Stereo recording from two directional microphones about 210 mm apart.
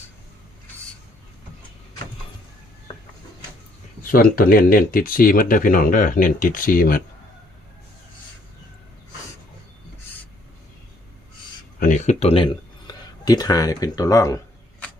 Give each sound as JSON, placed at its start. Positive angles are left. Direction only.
{"t": 4.1, "sound": "speech", "side_deg": 45}
{"t": 11.8, "sound": "speech", "side_deg": 35}
{"t": 12.9, "sound": "a sound", "side_deg": 20}